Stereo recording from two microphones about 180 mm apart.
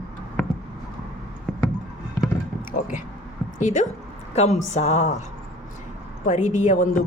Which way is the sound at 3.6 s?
45° left (ahead or behind).